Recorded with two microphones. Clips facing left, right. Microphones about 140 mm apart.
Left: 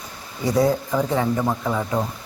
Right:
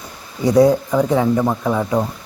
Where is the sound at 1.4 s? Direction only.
25° right (ahead or behind).